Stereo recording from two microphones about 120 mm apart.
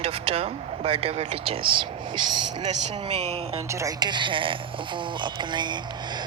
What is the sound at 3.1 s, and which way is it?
Speech, 60° right (ahead or behind).